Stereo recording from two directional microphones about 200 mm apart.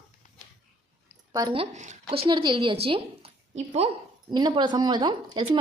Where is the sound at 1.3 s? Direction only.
20° right (ahead or behind).